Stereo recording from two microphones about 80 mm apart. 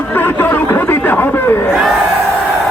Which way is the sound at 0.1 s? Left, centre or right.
Left.